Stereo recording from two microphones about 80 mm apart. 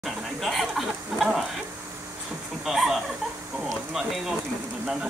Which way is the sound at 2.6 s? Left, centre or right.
Centre.